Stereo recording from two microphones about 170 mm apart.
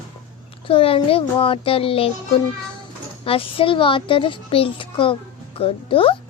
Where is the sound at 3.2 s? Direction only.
30° left (ahead or behind).